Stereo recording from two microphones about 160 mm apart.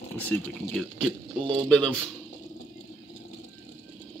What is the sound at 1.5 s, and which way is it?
Speech, 5° left (ahead or behind).